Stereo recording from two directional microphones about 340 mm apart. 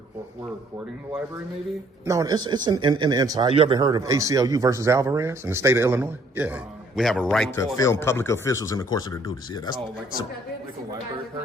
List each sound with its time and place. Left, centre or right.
2.0 s a man's voice: centre